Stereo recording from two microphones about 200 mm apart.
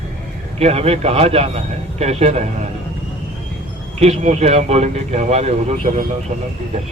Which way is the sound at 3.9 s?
35° right (ahead or behind).